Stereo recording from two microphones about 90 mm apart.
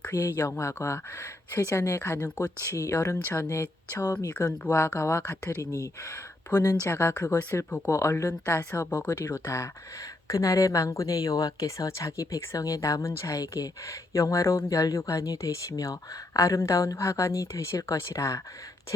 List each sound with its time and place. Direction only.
0.1 s speech: 40° left (ahead or behind)